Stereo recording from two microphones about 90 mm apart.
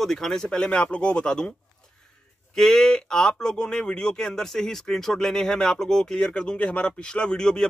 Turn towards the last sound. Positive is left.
turn(degrees=10)  # may be behind; listen again after turning